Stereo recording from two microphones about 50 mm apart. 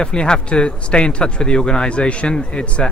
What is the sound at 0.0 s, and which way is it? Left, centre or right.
Speech, centre.